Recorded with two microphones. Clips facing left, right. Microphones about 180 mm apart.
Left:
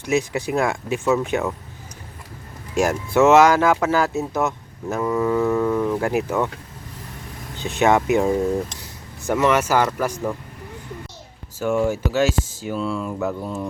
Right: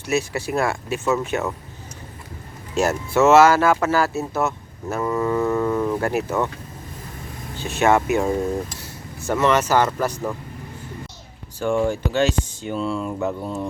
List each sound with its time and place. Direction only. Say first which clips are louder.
0.0 s speech: left 2 dB; 15° left (ahead or behind)
2.8 s speech: left 1 dB; 15° left (ahead or behind)
4.9 s speech: left 1 dB; 5° left (ahead or behind)
6.0 s speech: left 1 dB; 15° left (ahead or behind)
7.5 s speech: even; 15° left (ahead or behind)
11.6 s speech: even; 5° left (ahead or behind)